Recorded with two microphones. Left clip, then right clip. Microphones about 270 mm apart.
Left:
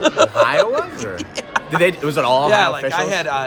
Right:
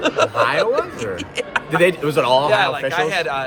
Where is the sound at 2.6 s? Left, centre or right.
Left.